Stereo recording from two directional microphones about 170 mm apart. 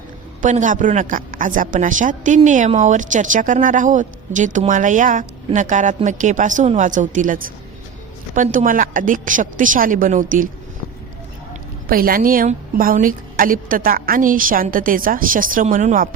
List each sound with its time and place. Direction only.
0.4 s a woman's voice: 50° right (ahead or behind)
11.9 s a woman's voice: 60° right (ahead or behind)